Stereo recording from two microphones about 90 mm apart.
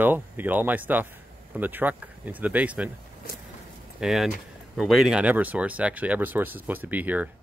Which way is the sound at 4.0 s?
5° right (ahead or behind).